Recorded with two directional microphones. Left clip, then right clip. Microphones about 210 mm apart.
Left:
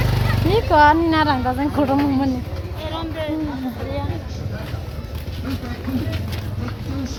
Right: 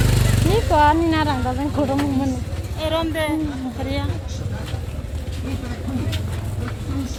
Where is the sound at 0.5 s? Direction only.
Centre (ahead or behind).